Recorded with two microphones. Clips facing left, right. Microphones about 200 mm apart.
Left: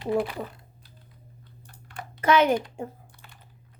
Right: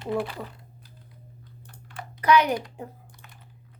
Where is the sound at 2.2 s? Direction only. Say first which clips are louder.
Left 1 dB; 25° left (ahead or behind).